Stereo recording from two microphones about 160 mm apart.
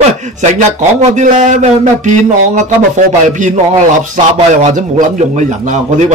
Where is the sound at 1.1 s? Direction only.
50° right (ahead or behind).